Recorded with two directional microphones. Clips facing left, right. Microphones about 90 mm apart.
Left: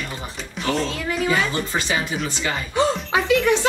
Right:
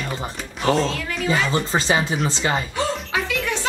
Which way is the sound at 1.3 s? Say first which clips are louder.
Right 4 dB; 30° right (ahead or behind).